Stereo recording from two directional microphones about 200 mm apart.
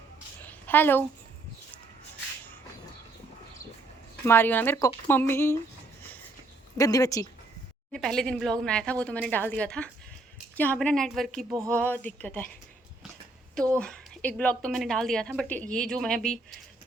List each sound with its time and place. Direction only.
0.4 s a sound: 10° left (ahead or behind)
4.3 s speech: 10° left (ahead or behind)
6.7 s speech: 15° left (ahead or behind)
7.9 s speech: centre (ahead or behind)
13.6 s speech: 5° left (ahead or behind)